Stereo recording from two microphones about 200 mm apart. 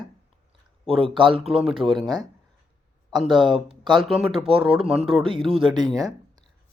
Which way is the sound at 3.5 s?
25° right (ahead or behind).